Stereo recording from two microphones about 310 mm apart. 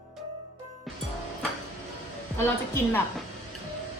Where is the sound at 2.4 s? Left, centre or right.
Centre.